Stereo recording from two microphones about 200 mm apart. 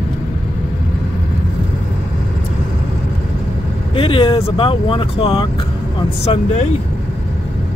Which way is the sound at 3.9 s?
25° left (ahead or behind).